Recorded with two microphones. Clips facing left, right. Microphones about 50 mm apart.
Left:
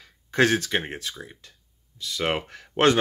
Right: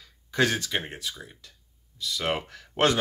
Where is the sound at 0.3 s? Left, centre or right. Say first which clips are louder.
Left 4 dB; left.